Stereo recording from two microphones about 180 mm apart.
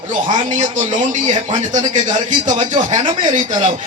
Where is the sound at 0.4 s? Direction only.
45° right (ahead or behind).